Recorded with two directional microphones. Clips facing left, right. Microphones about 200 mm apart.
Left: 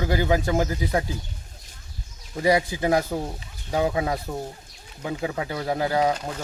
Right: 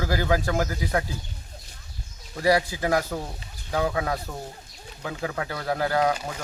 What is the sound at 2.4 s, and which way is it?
Speech, 20° left (ahead or behind).